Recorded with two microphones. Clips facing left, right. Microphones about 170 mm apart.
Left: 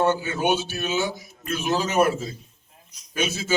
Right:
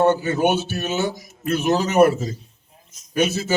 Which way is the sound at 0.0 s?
60° right (ahead or behind).